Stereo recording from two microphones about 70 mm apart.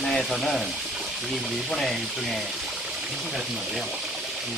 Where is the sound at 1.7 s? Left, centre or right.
Centre.